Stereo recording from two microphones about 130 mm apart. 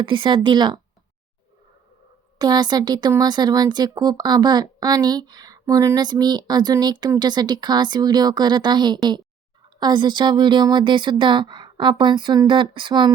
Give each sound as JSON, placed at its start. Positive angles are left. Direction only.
{"t": 0.0, "sound": "speech", "side_deg": -40}
{"t": 2.4, "sound": "speech", "side_deg": -35}